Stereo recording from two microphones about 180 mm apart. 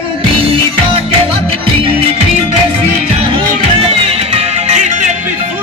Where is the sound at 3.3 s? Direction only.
35° right (ahead or behind).